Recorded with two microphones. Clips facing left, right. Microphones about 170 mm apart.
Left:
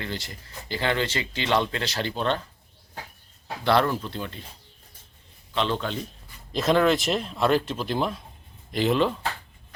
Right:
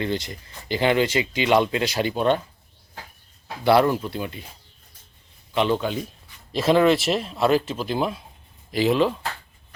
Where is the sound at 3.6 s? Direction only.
10° right (ahead or behind).